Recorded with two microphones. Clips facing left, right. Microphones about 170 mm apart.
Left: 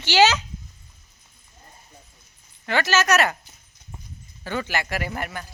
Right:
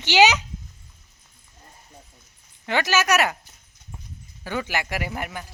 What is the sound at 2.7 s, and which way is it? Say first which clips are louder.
Speech: left 1 dB; 15° right (ahead or behind).